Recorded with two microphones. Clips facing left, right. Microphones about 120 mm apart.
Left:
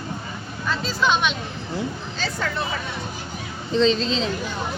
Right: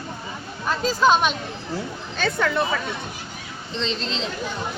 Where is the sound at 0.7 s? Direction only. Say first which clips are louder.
Right 4 dB; 45° right (ahead or behind).